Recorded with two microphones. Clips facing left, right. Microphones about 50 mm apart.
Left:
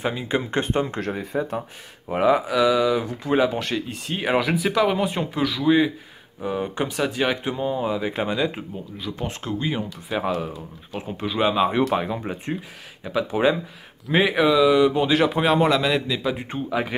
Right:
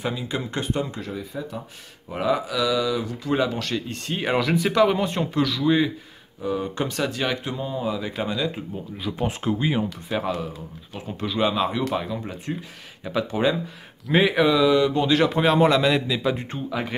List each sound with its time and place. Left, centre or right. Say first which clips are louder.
0.0 s speech: left 3 dB; left
2.0 s speech: left 4 dB; left
3.7 s speech: left 1 dB; centre
6.4 s speech: even; left
8.9 s speech: right 4 dB; centre
10.0 s speech: left 1 dB; centre
11.7 s speech: left 4 dB; left
13.0 s speech: left 2 dB; centre
16.4 s speech: left 3 dB; centre